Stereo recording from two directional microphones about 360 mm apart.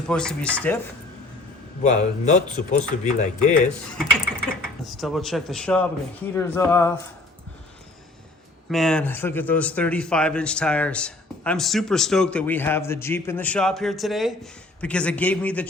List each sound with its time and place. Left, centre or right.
0.1 s speech: centre
1.8 s speech: centre
4.9 s speech: centre
8.7 s speech: centre